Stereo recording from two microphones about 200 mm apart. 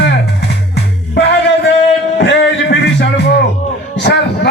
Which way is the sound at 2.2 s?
60° left (ahead or behind).